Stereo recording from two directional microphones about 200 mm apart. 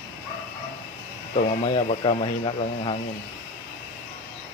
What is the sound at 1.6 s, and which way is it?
Speech, 30° left (ahead or behind).